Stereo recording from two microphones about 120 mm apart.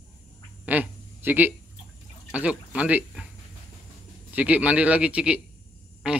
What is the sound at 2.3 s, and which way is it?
Speech, 10° right (ahead or behind).